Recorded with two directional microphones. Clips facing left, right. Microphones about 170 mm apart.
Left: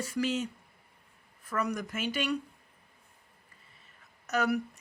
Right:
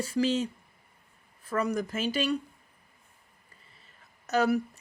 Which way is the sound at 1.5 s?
30° right (ahead or behind).